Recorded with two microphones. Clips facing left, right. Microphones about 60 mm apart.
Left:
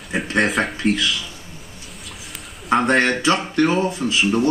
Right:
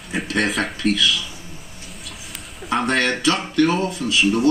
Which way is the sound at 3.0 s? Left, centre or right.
Left.